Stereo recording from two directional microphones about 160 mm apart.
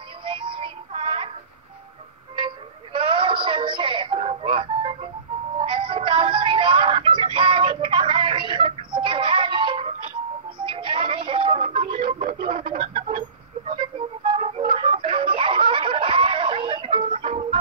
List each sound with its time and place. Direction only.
0.2 s music: 30° right (ahead or behind)
2.4 s music: 35° right (ahead or behind)